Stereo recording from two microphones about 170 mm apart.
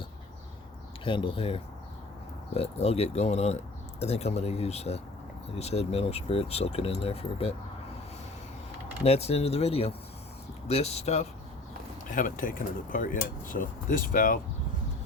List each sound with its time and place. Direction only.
1.0 s speech: 30° left (ahead or behind)
9.0 s speech: 40° left (ahead or behind)
12.1 s speech: 50° left (ahead or behind)